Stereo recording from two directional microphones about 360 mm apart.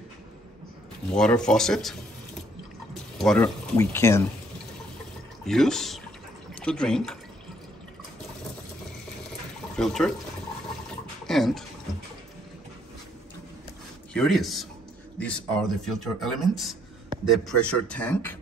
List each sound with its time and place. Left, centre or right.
1.1 s speech: centre
5.4 s speech: centre
9.8 s speech: centre
11.2 s speech: centre
14.1 s speech: centre